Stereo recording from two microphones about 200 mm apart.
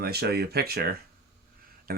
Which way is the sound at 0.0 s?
50° right (ahead or behind).